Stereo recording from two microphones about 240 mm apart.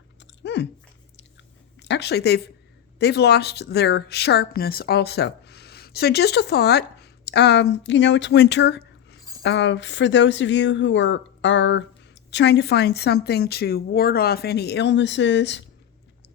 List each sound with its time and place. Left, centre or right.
0.4 s speech: left
1.8 s a woman's voice: left